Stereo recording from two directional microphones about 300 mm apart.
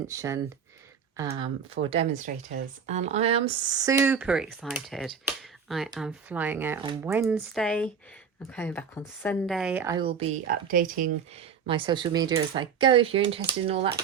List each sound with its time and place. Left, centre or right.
0.1 s speech: centre; by 11.1 s right
11.6 s speech: centre